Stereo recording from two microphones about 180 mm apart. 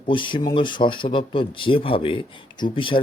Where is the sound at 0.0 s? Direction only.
25° left (ahead or behind).